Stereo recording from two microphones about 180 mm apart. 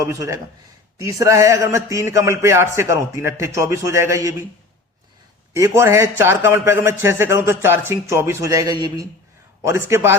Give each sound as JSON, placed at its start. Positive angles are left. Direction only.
{"t": 0.0, "sound": "a man's voice", "side_deg": -20}
{"t": 5.5, "sound": "a man's voice", "side_deg": -15}